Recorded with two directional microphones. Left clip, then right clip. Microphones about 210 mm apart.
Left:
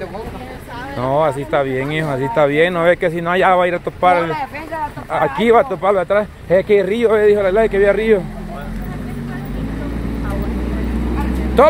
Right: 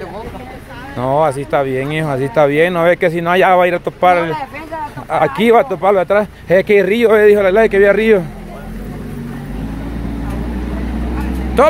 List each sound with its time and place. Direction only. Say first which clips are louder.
0.9 s speech: right 2 dB; 20° right (ahead or behind)
4.3 s speech: right 1 dB; centre (ahead or behind)
5.4 s speech: right 1 dB; 25° right (ahead or behind)